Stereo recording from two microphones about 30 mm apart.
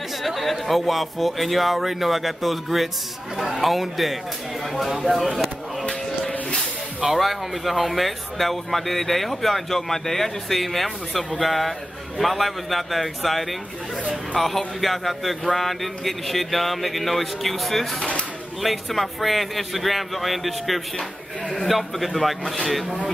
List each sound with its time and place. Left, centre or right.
0.2 s speech: centre
5.0 s a sound: centre
7.2 s speech: centre